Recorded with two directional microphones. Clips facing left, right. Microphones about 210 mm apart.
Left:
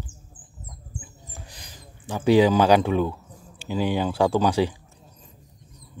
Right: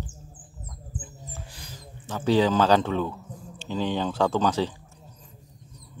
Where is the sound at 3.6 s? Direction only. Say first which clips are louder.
Left 3 dB; 10° left (ahead or behind).